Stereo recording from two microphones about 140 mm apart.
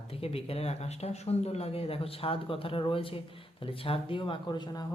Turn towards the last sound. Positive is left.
turn(degrees=30)  # may be behind; listen again after turning